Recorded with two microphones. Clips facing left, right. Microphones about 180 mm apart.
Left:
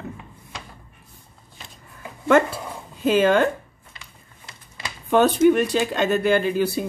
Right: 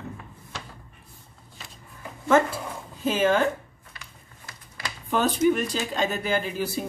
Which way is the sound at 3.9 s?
25° left (ahead or behind).